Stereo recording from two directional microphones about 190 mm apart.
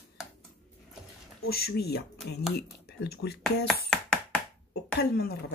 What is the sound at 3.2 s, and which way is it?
Speech, 60° left (ahead or behind).